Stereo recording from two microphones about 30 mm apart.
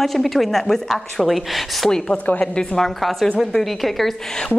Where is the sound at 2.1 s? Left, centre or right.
Left.